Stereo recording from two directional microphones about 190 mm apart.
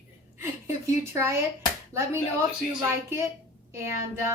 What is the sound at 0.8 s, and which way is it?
Speech, 15° right (ahead or behind).